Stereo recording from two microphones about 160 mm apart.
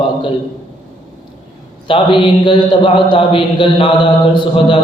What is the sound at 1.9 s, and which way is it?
A man's voice, 30° left (ahead or behind).